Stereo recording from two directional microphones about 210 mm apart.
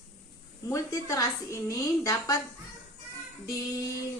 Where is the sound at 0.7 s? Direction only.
15° left (ahead or behind).